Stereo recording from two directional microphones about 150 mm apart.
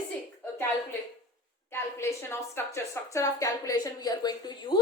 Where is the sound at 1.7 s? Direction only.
15° left (ahead or behind).